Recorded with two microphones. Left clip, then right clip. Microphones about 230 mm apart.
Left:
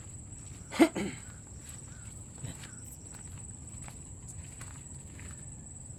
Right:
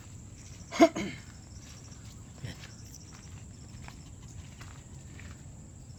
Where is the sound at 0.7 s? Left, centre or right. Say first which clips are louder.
Right 3 dB; left.